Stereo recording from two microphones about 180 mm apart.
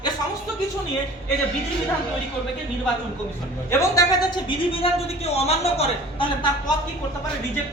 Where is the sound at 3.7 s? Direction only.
15° left (ahead or behind).